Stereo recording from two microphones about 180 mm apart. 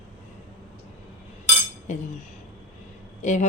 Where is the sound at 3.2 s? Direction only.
45° left (ahead or behind).